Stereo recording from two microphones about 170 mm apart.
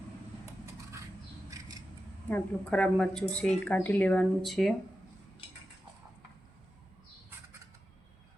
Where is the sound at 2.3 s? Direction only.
5° left (ahead or behind).